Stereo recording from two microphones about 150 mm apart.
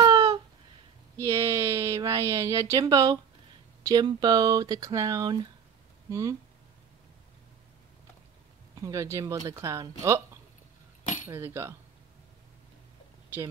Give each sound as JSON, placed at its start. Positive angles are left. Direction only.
{"t": 0.0, "sound": "a sound", "side_deg": -25}
{"t": 1.2, "sound": "speech", "side_deg": -20}
{"t": 8.8, "sound": "speech", "side_deg": -20}